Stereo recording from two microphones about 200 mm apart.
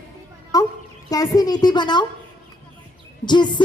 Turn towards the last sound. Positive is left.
turn(degrees=20)  # may be behind; listen again after turning